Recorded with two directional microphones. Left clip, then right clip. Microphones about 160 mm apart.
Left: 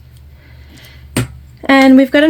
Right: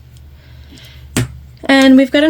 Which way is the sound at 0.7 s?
20° left (ahead or behind).